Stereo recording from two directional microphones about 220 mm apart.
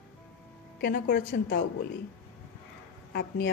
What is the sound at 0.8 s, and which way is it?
Speech, 45° left (ahead or behind).